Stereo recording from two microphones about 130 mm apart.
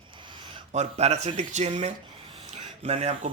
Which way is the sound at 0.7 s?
60° right (ahead or behind).